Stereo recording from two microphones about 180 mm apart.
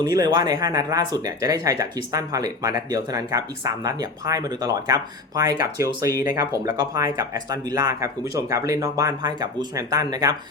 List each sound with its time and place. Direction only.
0.0 s speech: 20° right (ahead or behind)